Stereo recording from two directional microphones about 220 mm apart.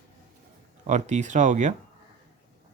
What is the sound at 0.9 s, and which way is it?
Speech, 30° right (ahead or behind).